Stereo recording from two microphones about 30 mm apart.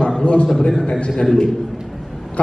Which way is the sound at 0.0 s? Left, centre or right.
Left.